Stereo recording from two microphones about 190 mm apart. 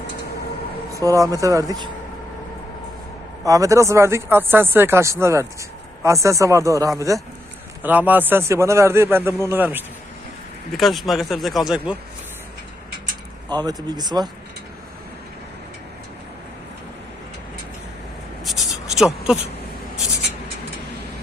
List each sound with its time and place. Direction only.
0.9 s speech: 15° right (ahead or behind)
3.4 s speech: 15° right (ahead or behind)
10.8 s speech: centre (ahead or behind)
13.5 s speech: 20° right (ahead or behind)
18.4 s a sound: centre (ahead or behind)